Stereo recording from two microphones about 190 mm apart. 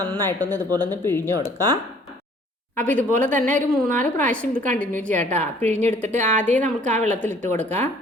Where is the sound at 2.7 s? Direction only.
10° left (ahead or behind).